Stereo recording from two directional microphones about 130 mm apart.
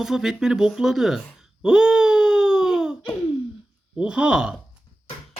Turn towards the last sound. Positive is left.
turn(degrees=-5)  # may be behind; listen again after turning